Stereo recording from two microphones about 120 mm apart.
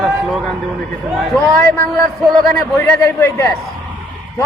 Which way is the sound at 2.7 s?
20° left (ahead or behind).